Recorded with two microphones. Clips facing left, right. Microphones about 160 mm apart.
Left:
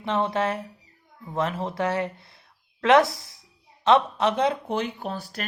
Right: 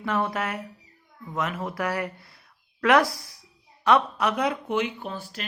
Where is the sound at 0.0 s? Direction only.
25° left (ahead or behind).